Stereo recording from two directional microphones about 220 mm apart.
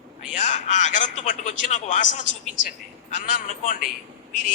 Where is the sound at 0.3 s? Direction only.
30° left (ahead or behind).